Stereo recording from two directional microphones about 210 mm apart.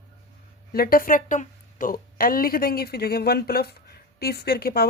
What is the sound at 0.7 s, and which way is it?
A woman's voice, 45° left (ahead or behind).